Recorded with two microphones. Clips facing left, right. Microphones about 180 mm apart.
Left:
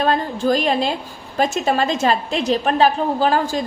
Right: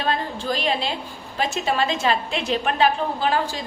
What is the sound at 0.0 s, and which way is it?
A woman's voice, 45° left (ahead or behind).